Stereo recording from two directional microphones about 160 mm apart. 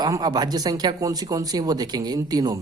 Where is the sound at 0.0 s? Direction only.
25° right (ahead or behind).